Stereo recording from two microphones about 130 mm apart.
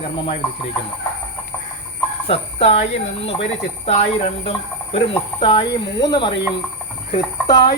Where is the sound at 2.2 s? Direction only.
50° left (ahead or behind).